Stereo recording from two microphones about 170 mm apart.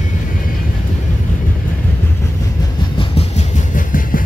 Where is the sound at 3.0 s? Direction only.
40° left (ahead or behind).